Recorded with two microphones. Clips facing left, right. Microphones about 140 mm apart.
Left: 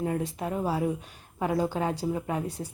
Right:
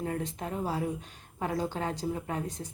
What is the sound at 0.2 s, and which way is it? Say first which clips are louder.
A woman's voice: left 4 dB; 10° left (ahead or behind).